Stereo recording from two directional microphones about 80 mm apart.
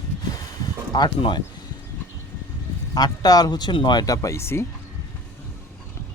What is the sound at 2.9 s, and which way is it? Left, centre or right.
Speech, left.